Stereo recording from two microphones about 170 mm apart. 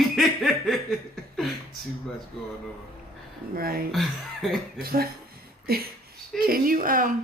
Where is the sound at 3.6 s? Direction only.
60° right (ahead or behind).